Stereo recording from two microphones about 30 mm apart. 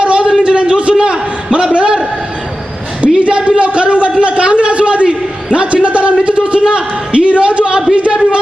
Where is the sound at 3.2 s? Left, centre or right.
Right.